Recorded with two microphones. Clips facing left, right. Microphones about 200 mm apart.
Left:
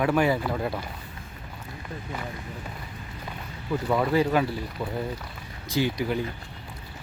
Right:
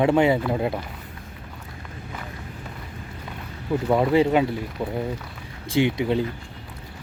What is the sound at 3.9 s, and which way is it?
Speech, 25° right (ahead or behind).